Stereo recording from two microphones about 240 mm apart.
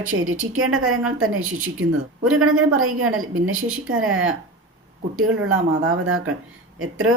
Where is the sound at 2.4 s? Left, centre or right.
Right.